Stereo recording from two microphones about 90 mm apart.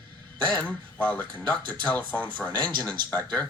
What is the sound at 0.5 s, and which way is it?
Speech, 15° left (ahead or behind).